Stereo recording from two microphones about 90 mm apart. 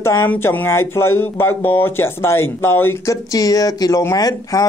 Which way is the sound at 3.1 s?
40° left (ahead or behind).